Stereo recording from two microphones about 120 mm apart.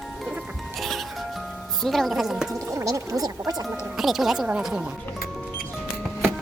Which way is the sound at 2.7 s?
25° right (ahead or behind).